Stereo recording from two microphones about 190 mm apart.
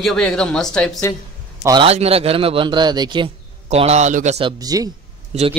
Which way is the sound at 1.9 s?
30° right (ahead or behind).